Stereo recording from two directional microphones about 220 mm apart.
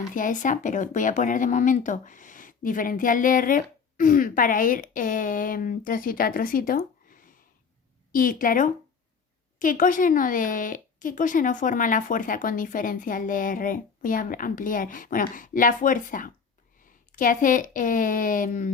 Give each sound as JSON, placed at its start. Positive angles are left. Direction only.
{"t": 0.1, "sound": "speech", "side_deg": 35}